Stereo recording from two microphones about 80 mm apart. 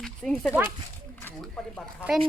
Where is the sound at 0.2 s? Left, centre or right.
Centre.